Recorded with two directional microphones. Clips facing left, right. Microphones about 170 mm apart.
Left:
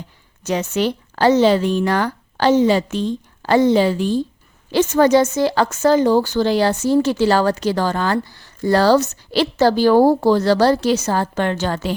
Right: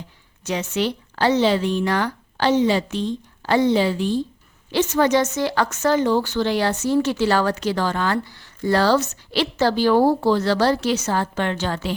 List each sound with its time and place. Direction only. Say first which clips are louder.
0.4 s a woman's voice: left 4 dB; 45° left (ahead or behind)